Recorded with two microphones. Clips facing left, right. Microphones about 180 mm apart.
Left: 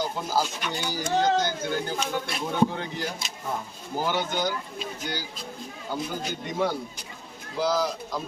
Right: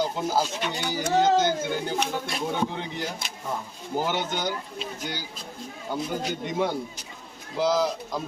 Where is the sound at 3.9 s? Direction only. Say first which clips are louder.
Even; 20° right (ahead or behind).